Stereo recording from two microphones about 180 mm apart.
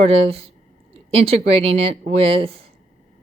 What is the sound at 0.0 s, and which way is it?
Speech, 35° right (ahead or behind).